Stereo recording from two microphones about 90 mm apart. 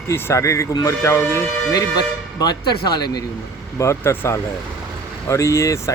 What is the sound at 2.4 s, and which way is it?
Speech, 50° left (ahead or behind).